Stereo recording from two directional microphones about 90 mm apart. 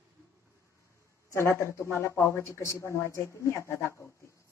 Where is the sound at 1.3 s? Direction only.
30° left (ahead or behind).